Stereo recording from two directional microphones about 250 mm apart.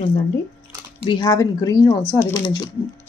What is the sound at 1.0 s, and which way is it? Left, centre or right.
Speech, centre.